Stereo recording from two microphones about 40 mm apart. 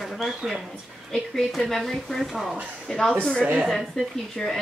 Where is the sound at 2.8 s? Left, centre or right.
Centre.